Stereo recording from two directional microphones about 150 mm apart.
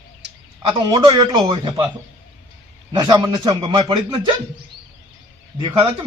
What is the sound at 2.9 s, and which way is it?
A man's voice, 30° right (ahead or behind).